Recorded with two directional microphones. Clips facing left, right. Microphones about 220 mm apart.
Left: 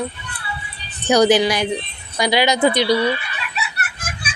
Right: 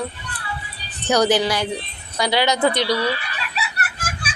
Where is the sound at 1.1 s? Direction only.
15° left (ahead or behind).